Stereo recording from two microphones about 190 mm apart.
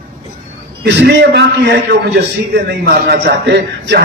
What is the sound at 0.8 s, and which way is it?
A man's voice, 60° right (ahead or behind).